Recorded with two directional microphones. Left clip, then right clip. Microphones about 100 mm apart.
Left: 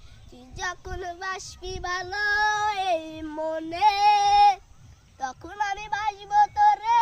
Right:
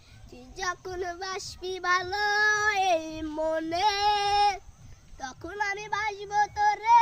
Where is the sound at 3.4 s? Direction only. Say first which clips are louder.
Left 4 dB; 40° right (ahead or behind).